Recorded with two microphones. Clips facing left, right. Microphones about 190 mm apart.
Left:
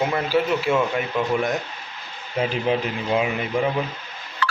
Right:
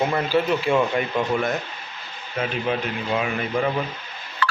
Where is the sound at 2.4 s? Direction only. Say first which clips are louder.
Left 2 dB; 25° left (ahead or behind).